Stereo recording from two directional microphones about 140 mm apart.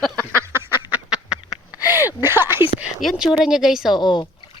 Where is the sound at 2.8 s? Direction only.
Centre (ahead or behind).